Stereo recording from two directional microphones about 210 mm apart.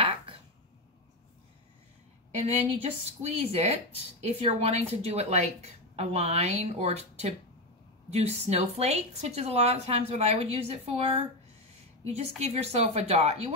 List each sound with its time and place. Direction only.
2.3 s a woman's voice: 30° right (ahead or behind)